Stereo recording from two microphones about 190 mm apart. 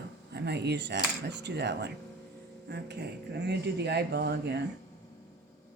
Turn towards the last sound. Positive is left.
turn(degrees=-65)  # may be behind; listen again after turning